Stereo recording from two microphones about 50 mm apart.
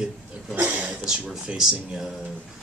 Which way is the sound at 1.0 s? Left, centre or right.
Centre.